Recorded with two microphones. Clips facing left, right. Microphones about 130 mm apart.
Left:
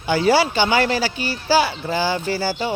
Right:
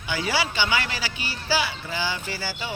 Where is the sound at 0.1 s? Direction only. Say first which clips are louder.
Left 10 dB; 35° left (ahead or behind).